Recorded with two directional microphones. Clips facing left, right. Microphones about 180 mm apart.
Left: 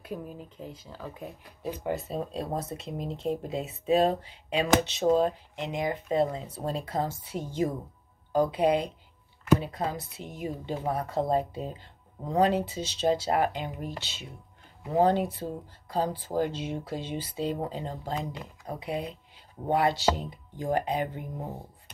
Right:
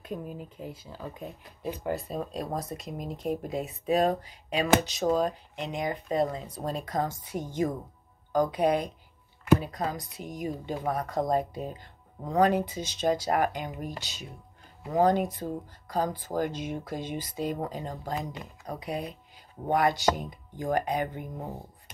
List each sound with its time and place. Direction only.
0.0 s speech: centre (ahead or behind)
1.9 s speech: 25° left (ahead or behind)